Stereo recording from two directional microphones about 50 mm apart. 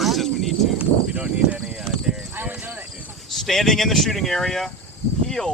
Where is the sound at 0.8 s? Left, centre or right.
Right.